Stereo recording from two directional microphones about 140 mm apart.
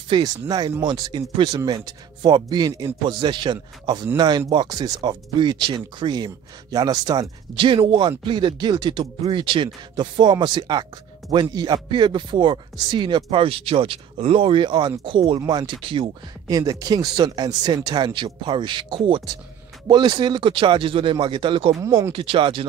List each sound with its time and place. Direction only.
0.1 s speech: 30° right (ahead or behind)
16.4 s speech: 25° right (ahead or behind)
21.8 s speech: 20° right (ahead or behind)
22.1 s speech: 40° right (ahead or behind)